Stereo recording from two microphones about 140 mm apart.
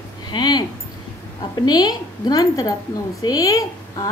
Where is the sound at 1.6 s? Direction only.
30° left (ahead or behind).